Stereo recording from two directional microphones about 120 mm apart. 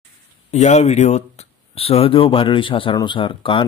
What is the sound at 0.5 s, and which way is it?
Speech, 70° left (ahead or behind).